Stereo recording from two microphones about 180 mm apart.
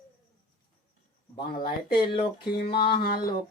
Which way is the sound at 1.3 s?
25° left (ahead or behind).